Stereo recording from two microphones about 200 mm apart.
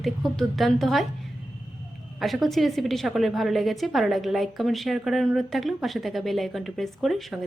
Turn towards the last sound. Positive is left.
turn(degrees=0)  # may be behind; listen again after turning